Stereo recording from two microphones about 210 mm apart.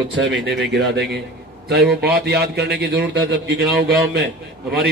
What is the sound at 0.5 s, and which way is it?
A man's voice, 55° right (ahead or behind).